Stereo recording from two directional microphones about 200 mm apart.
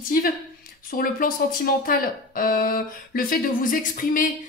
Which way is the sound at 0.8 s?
45° left (ahead or behind).